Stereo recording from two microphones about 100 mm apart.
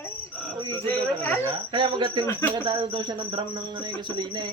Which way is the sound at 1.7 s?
55° right (ahead or behind).